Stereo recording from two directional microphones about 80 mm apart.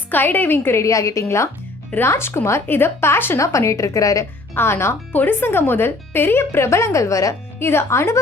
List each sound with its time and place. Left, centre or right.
0.1 s a woman's voice: left
3.4 s a woman's voice: left
4.5 s speech: left
7.6 s a woman's voice: left